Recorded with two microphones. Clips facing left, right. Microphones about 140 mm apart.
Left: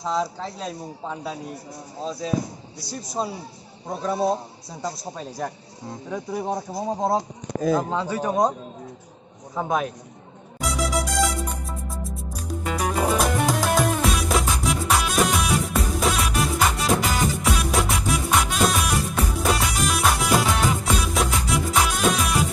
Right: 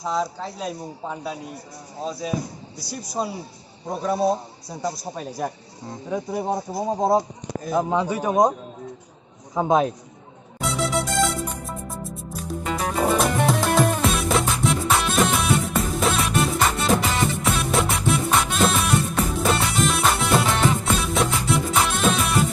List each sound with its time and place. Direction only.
0.0 s speech: 5° right (ahead or behind)
3.2 s speech: 5° right (ahead or behind)
4.8 s speech: 10° right (ahead or behind)
9.6 s a man's voice: 25° right (ahead or behind)
10.6 s music: centre (ahead or behind)